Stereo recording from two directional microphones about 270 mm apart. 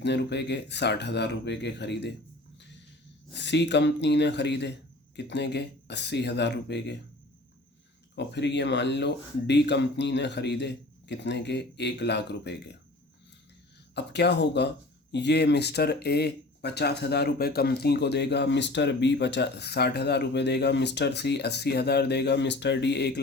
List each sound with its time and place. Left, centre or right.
0.0 s speech: left
3.3 s speech: left
8.1 s speech: left
13.9 s speech: left